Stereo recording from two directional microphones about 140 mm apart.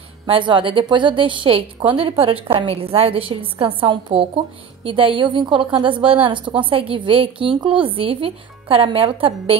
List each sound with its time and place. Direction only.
0.3 s a woman's voice: 35° right (ahead or behind)